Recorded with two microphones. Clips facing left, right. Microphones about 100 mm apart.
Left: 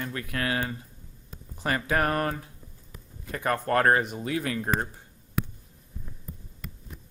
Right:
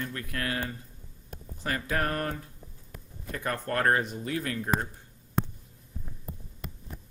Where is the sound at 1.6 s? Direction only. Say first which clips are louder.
Left 4 dB; 90° left.